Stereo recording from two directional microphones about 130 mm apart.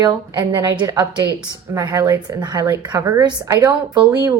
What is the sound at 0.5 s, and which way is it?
A woman's voice, 25° right (ahead or behind).